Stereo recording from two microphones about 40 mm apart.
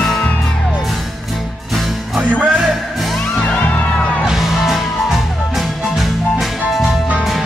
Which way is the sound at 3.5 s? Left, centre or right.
Left.